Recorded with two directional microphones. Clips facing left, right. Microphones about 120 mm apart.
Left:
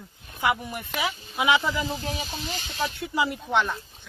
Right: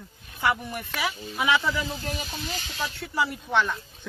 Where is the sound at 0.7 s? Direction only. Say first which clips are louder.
Left 1 dB; 20° left (ahead or behind).